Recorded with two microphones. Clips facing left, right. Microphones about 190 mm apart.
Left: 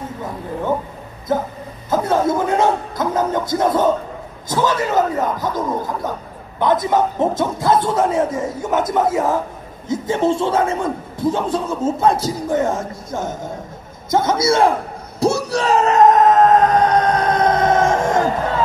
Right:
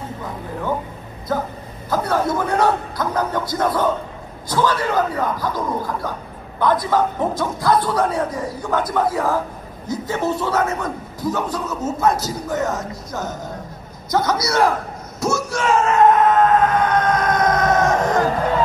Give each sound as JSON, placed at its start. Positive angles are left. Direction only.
{"t": 1.3, "sound": "a man's voice", "side_deg": 25}
{"t": 6.6, "sound": "a man's voice", "side_deg": 20}
{"t": 15.1, "sound": "bellow", "side_deg": 35}